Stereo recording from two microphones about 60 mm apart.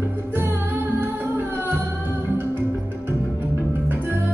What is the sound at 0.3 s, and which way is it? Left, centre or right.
Music, right.